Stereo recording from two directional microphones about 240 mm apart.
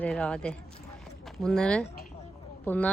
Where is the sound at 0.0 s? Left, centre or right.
Centre.